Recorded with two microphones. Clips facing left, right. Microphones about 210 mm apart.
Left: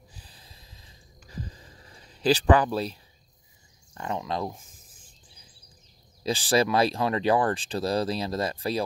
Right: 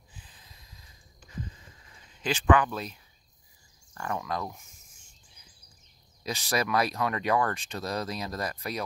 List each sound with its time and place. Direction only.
0.1 s snort: 35° left (ahead or behind)
3.9 s a sound: 20° left (ahead or behind)
6.2 s speech: 30° left (ahead or behind)